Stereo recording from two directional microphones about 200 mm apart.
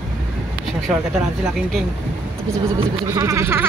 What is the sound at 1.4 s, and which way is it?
Speech, centre (ahead or behind).